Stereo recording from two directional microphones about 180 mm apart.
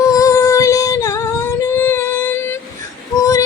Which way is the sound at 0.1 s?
20° left (ahead or behind).